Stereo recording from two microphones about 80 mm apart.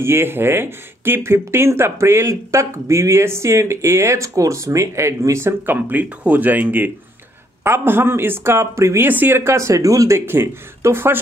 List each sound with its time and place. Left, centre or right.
0.0 s speech: right
9.0 s speech: right